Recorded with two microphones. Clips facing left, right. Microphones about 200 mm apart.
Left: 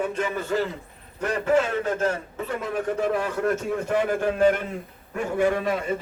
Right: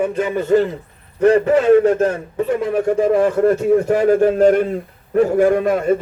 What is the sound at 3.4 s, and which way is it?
A man's voice, 35° right (ahead or behind).